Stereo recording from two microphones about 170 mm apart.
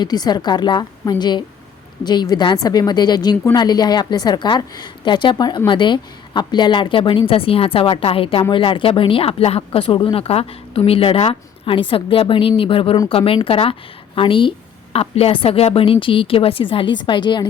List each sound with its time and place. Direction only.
0.0 s a woman's voice: 25° left (ahead or behind)